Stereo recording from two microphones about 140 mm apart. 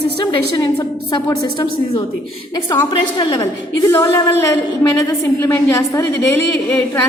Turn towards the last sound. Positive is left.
turn(degrees=20)  # may be behind; listen again after turning